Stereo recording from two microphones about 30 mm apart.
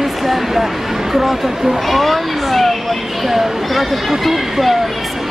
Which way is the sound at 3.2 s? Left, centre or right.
Centre.